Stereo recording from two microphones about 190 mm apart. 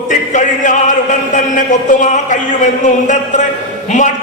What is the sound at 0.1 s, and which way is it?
A man's voice, 40° left (ahead or behind).